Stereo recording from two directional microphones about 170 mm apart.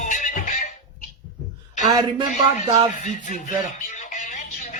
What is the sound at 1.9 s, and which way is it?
Speech, 25° right (ahead or behind).